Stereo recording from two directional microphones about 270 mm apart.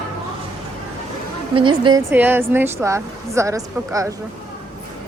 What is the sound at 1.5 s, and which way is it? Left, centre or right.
A woman's voice, centre.